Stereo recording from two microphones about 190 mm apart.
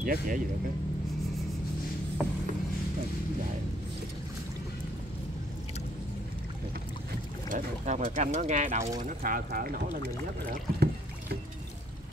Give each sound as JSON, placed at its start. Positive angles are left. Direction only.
{"t": 0.0, "sound": "speech", "side_deg": -45}
{"t": 7.4, "sound": "speech", "side_deg": -40}
{"t": 10.5, "sound": "rowboat", "side_deg": -55}